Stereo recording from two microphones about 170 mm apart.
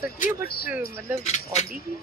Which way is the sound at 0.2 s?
65° left (ahead or behind).